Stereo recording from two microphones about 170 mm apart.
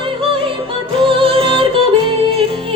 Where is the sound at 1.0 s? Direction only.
30° right (ahead or behind).